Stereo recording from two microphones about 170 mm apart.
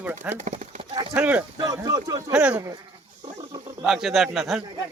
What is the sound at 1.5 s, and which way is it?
Speech, 20° right (ahead or behind).